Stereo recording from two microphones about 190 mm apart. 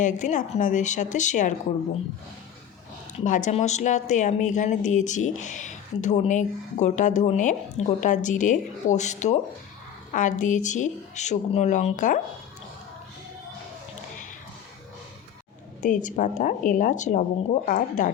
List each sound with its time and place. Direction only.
0.0 s a woman's voice: 40° left (ahead or behind)
3.2 s a woman's voice: 40° left (ahead or behind)
15.8 s a woman's voice: 40° left (ahead or behind)